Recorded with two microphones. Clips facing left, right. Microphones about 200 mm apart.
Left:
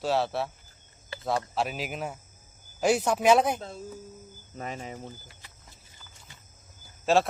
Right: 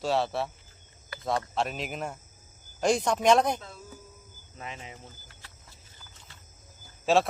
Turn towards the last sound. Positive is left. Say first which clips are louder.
# even
turn(degrees=0)  # may be behind; listen again after turning